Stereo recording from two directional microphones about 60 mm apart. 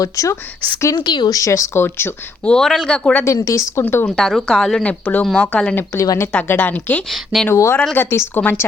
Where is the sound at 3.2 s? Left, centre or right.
Left.